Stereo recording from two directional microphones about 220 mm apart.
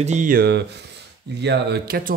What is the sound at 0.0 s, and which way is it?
Speech, 35° right (ahead or behind).